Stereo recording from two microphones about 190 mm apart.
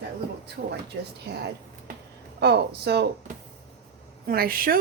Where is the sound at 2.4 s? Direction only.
60° right (ahead or behind).